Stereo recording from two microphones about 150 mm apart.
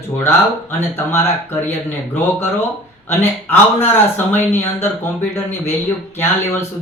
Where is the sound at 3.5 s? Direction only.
15° left (ahead or behind).